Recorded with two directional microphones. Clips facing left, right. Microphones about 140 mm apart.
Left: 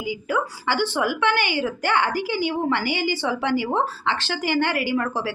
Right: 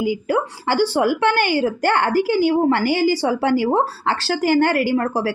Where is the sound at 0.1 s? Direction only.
45° right (ahead or behind).